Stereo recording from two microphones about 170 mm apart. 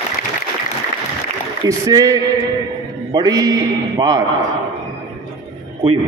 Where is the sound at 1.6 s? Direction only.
20° right (ahead or behind).